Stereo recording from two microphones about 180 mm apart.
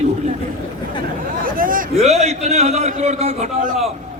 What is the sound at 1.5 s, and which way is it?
A man's voice, 50° right (ahead or behind).